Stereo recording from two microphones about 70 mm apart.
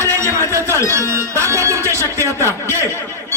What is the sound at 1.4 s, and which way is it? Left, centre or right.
Music, right.